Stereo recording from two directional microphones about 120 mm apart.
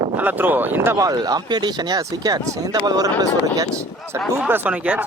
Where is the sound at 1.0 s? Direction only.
30° right (ahead or behind).